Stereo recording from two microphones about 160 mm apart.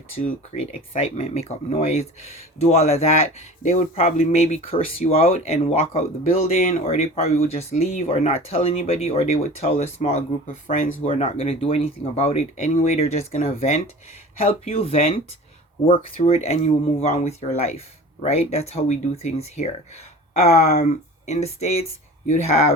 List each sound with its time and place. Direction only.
0.6 s speech: 40° left (ahead or behind)
11.1 s speech: 35° left (ahead or behind)
16.2 s speech: 40° left (ahead or behind)